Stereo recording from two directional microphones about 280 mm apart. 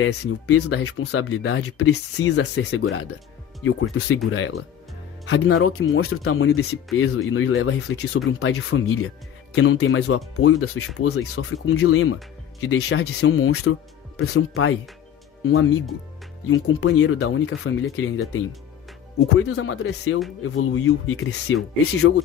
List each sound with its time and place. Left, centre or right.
0.0 s speech: left
16.4 s speech: left